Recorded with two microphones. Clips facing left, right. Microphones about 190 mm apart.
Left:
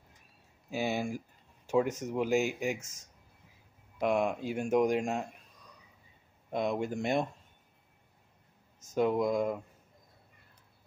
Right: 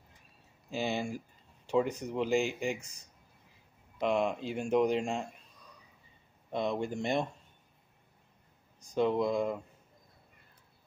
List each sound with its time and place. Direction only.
0.7 s speech: 10° left (ahead or behind)
2.8 s speech: 45° left (ahead or behind)
4.0 s speech: 10° left (ahead or behind)
6.5 s speech: 5° left (ahead or behind)
8.9 s speech: 5° left (ahead or behind)